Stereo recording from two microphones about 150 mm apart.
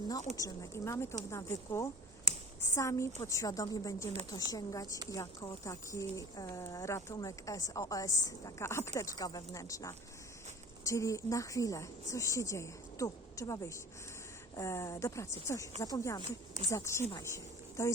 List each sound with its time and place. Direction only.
0.3 s speech: 20° left (ahead or behind)